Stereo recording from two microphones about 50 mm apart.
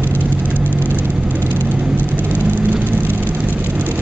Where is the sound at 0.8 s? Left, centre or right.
Left.